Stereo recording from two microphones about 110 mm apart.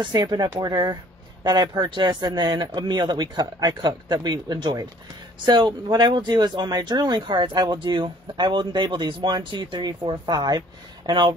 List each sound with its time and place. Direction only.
0.0 s speech: 35° right (ahead or behind)